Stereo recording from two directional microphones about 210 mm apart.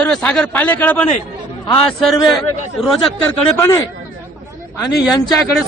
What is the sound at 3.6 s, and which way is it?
Speech, 15° left (ahead or behind).